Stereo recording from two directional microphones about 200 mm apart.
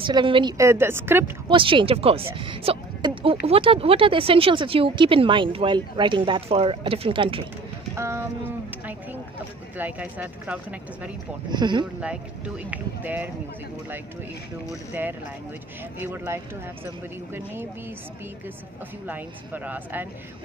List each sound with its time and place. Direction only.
0.0 s a woman's voice: 25° right (ahead or behind)
1.5 s speech: 25° right (ahead or behind)
7.9 s a woman's voice: 15° right (ahead or behind)
11.5 s speech: 20° right (ahead or behind)
12.0 s a woman's voice: 5° right (ahead or behind)
14.9 s a woman's voice: 10° right (ahead or behind)
19.0 s a woman's voice: 10° right (ahead or behind)